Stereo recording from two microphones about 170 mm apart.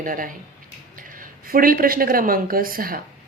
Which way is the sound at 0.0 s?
55° right (ahead or behind).